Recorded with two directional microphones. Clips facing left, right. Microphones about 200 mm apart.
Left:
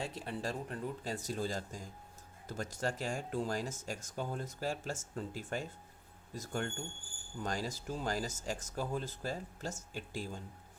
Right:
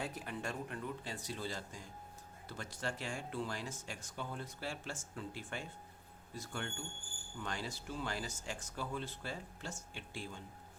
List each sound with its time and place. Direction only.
0.0 s speech: 30° left (ahead or behind)